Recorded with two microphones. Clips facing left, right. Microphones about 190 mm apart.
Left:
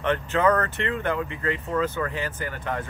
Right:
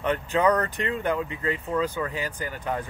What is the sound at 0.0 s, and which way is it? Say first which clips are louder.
Speech: left 1 dB; 15° right (ahead or behind).